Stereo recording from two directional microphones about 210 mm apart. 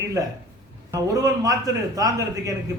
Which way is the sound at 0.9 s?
15° right (ahead or behind).